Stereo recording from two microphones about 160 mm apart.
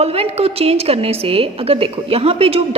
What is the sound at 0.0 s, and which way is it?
A woman's voice, 40° right (ahead or behind).